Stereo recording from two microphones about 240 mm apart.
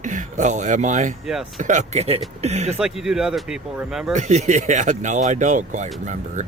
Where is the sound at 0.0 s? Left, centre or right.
Right.